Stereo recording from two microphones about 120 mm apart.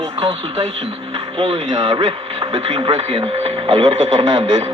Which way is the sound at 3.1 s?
50° right (ahead or behind).